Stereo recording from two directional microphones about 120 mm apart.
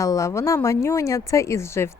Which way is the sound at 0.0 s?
25° left (ahead or behind).